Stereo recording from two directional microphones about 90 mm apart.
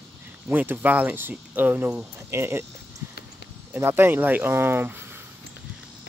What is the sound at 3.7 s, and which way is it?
Speech, 25° right (ahead or behind).